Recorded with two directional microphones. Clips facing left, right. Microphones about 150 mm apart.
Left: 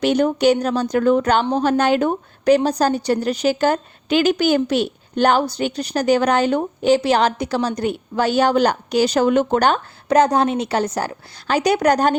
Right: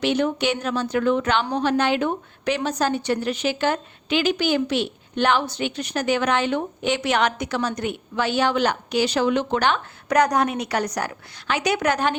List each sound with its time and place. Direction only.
0.0 s a woman's voice: 40° left (ahead or behind)
10.1 s a woman's voice: 25° left (ahead or behind)